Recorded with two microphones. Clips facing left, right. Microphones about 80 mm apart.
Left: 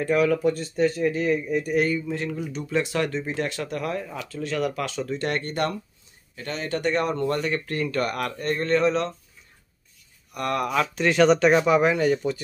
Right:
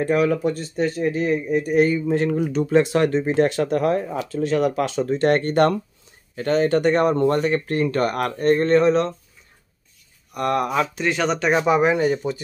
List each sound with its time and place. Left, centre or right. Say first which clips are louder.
0.0 s speech: right 2 dB; right
2.0 s speech: right 9 dB; right
2.7 s speech: right 7 dB; right
4.2 s speech: right 7 dB; right
10.3 s speech: right 4 dB; right
11.0 s speech: left 4 dB; centre
11.5 s speech: right 1 dB; centre